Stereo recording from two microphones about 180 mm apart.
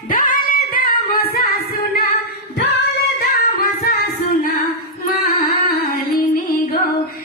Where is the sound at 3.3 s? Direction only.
60° left (ahead or behind).